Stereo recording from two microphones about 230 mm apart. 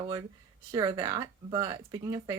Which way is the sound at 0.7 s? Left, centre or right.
Centre.